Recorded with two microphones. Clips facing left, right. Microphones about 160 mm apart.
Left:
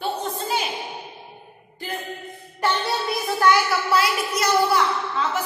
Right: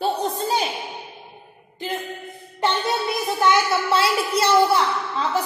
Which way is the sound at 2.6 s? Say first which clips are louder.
Right 1 dB; 20° right (ahead or behind).